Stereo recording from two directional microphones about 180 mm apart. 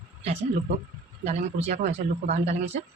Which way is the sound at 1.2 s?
35° right (ahead or behind).